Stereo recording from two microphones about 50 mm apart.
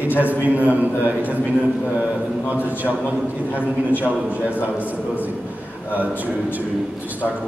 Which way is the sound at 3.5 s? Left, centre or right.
Left.